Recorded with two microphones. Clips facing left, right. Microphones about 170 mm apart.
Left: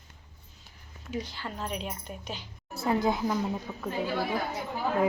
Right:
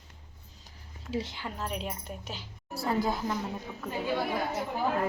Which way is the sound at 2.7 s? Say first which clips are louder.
Left 2 dB; 20° left (ahead or behind).